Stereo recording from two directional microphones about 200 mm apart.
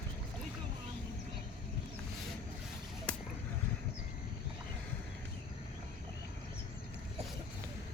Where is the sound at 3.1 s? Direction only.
5° left (ahead or behind).